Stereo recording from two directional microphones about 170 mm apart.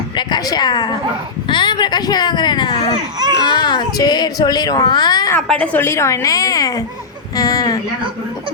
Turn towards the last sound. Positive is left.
turn(degrees=20)  # may be behind; listen again after turning